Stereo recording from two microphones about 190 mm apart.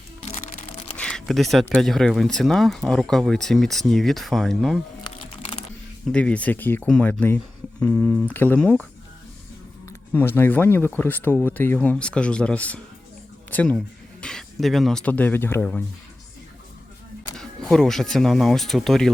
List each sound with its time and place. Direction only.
0.9 s speech: 5° left (ahead or behind)
5.0 s music: 25° left (ahead or behind)
6.1 s speech: 5° left (ahead or behind)
10.1 s speech: 10° left (ahead or behind)
17.3 s speech: centre (ahead or behind)